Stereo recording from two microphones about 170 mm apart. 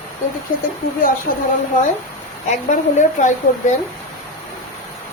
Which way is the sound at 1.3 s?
55° left (ahead or behind).